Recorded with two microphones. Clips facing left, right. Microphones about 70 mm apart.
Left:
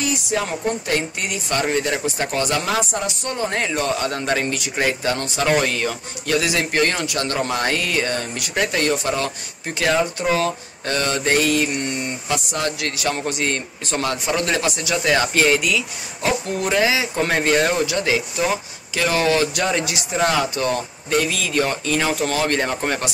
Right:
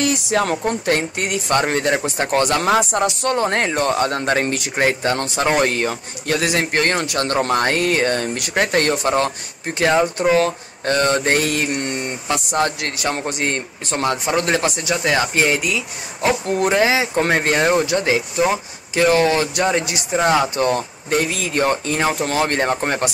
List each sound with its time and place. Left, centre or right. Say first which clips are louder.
0.3 s speech: right 2 dB; right
12.9 s speech: right 1 dB; right
14.9 s speech: left 1 dB; centre; by 17.6 s right
17.9 s speech: right 3 dB; right
20.2 s speech: right 4 dB; right